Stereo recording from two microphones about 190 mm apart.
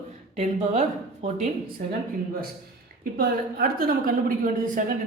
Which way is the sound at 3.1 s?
50° right (ahead or behind).